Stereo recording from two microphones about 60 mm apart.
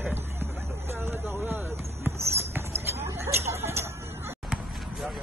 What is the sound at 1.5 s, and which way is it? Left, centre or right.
Basketball bounce, right.